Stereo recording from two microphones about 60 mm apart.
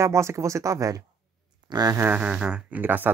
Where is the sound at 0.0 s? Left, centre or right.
Right.